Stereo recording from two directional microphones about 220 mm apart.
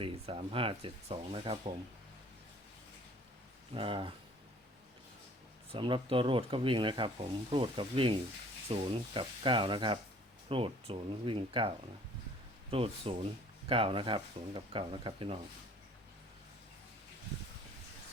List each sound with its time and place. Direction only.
0.0 s speech: 25° right (ahead or behind)
3.8 s speech: 25° right (ahead or behind)
5.7 s speech: 25° right (ahead or behind)
12.7 s speech: 25° right (ahead or behind)